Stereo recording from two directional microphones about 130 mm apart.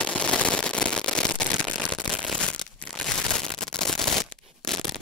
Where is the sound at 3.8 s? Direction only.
Centre (ahead or behind).